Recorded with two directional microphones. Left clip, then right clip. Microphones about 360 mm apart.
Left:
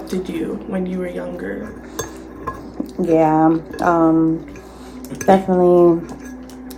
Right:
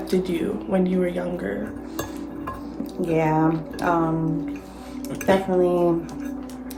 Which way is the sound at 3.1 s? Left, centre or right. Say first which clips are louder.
Left 7 dB; left.